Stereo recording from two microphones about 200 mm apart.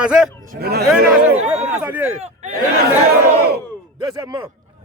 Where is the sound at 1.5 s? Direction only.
5° right (ahead or behind).